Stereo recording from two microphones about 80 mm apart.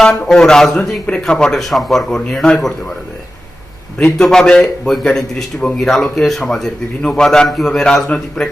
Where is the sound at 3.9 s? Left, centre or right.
Centre.